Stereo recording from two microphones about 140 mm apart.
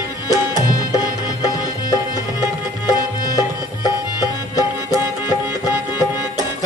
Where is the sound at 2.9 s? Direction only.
30° left (ahead or behind).